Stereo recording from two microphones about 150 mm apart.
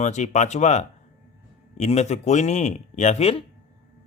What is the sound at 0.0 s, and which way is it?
Speech, 50° left (ahead or behind).